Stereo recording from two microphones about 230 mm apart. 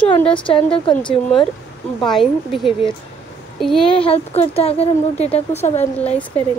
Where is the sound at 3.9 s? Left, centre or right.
Left.